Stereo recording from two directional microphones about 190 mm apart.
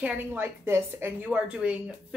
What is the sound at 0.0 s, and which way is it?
A woman's voice, 10° right (ahead or behind).